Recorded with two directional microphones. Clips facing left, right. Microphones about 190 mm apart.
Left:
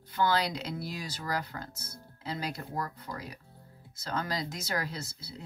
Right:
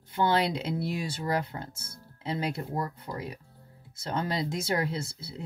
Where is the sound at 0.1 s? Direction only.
25° right (ahead or behind).